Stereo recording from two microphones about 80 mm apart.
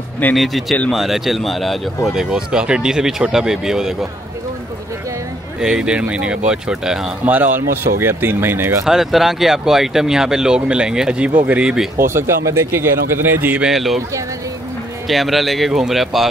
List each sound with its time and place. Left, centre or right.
0.4 s speech: centre
2.1 s speech: centre
5.6 s speech: centre
7.2 s speech: right
8.8 s speech: centre
12.0 s speech: right
13.6 s speech: centre
15.0 s speech: centre